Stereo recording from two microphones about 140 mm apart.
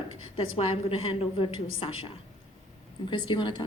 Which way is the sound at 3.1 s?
35° left (ahead or behind).